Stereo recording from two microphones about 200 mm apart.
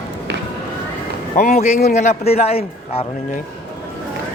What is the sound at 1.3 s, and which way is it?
A man's voice, 35° left (ahead or behind).